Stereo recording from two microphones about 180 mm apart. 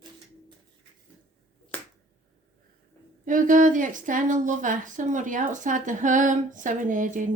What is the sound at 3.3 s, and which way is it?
A woman's voice, 45° right (ahead or behind).